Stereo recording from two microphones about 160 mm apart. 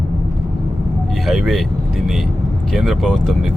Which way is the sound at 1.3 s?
Centre (ahead or behind).